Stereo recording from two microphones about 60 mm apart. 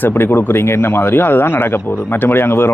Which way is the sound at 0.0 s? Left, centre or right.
Left.